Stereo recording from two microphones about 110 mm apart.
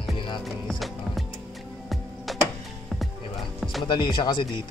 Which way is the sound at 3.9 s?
45° left (ahead or behind).